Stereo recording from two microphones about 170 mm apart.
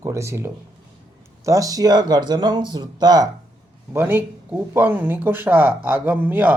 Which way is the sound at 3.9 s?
10° right (ahead or behind).